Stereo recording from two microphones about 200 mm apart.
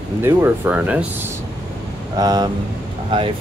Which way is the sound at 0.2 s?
10° right (ahead or behind).